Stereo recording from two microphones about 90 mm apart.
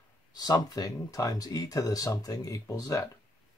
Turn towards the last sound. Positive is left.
turn(degrees=40)  # may be behind; listen again after turning